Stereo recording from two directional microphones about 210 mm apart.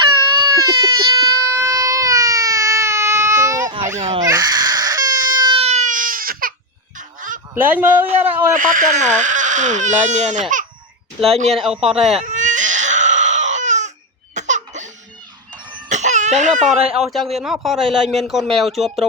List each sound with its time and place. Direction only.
0.0 s a sound: 20° right (ahead or behind)
3.8 s speech: 35° right (ahead or behind)
4.2 s a sound: 15° right (ahead or behind); by 6.5 s 40° right (ahead or behind)
7.2 s goose: 40° right (ahead or behind)
7.5 s a man's voice: 10° right (ahead or behind)
8.5 s speech: 40° right (ahead or behind)
11.5 s a man's voice: centre (ahead or behind)
12.2 s crying: 35° right (ahead or behind)
14.3 s laughter: 35° right (ahead or behind)
15.9 s a sound: 35° right (ahead or behind)
17.0 s a man's voice: centre (ahead or behind)